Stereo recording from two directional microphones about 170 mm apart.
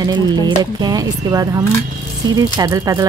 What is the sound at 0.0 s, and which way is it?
Speech, 25° right (ahead or behind).